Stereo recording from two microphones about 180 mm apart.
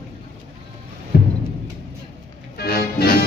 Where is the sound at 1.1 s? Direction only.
55° left (ahead or behind).